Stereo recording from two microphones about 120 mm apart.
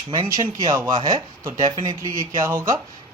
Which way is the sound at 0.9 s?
40° right (ahead or behind).